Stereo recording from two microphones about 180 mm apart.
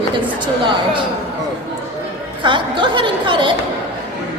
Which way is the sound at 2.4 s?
25° right (ahead or behind).